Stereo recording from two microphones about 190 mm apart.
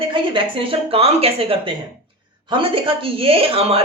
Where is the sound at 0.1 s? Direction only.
30° right (ahead or behind).